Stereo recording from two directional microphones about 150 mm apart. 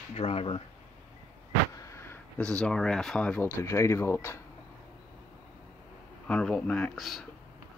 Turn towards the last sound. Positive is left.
turn(degrees=0)  # may be behind; listen again after turning